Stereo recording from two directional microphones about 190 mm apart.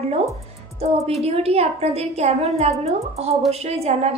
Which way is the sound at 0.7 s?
35° right (ahead or behind).